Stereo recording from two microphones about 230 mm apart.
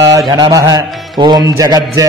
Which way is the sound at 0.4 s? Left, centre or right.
Centre.